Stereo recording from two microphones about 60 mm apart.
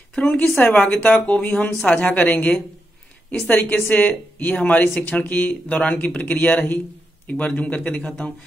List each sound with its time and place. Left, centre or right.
0.1 s speech: centre